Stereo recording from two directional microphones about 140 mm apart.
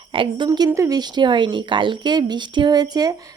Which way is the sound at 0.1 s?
35° right (ahead or behind).